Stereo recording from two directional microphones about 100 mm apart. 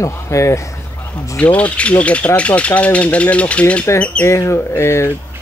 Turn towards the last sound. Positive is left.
turn(degrees=25)  # may be behind; listen again after turning